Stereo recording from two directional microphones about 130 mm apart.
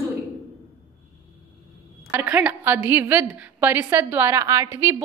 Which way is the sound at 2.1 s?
15° right (ahead or behind).